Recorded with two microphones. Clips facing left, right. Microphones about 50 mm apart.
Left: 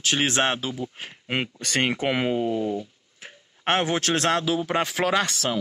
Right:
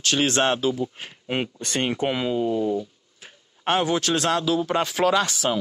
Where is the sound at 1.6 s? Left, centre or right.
Left.